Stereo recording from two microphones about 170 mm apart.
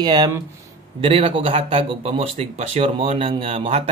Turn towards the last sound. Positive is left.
turn(degrees=-35)  # may be behind; listen again after turning